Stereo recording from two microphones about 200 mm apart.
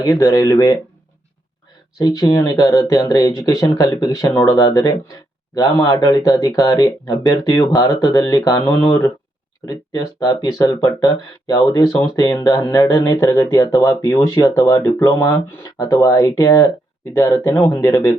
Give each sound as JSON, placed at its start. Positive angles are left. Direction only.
{"t": 0.0, "sound": "speech", "side_deg": 15}
{"t": 2.0, "sound": "speech", "side_deg": 20}